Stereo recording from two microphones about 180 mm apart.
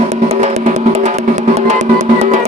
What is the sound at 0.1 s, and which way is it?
Music, 40° right (ahead or behind).